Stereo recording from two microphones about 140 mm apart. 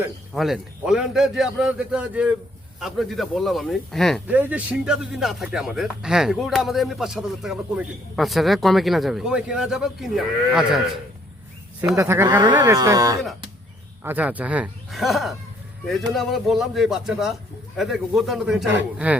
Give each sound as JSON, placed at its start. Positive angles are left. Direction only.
{"t": 0.3, "sound": "a man's voice", "side_deg": 0}
{"t": 4.3, "sound": "a man's voice", "side_deg": -10}
{"t": 11.9, "sound": "speech", "side_deg": -20}
{"t": 14.0, "sound": "a man's voice", "side_deg": -15}